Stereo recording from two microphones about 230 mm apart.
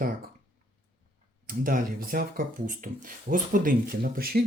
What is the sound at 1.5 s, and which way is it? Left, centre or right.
Speech, right.